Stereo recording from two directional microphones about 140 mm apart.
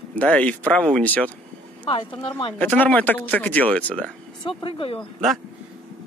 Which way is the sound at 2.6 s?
10° left (ahead or behind).